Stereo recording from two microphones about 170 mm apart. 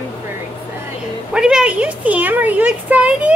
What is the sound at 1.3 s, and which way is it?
A woman's voice, 5° right (ahead or behind).